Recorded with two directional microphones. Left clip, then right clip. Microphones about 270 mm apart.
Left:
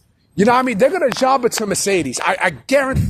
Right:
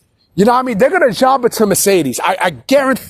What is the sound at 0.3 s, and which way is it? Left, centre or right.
Speech, centre.